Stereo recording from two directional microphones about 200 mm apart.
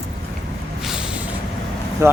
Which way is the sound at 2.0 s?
15° right (ahead or behind).